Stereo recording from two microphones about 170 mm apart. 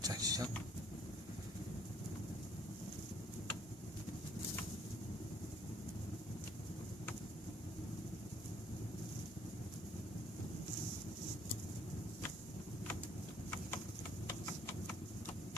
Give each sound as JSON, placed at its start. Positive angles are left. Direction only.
{"t": 0.0, "sound": "vehicle", "side_deg": -20}
{"t": 14.3, "sound": "clip-clop", "side_deg": 15}